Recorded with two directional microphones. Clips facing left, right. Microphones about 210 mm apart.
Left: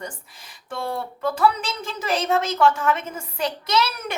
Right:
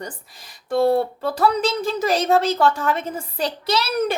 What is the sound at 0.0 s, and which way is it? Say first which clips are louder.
A woman's voice: right 2 dB; 35° right (ahead or behind).